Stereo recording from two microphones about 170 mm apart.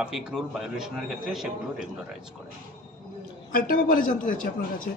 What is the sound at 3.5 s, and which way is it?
A man's voice, 55° left (ahead or behind).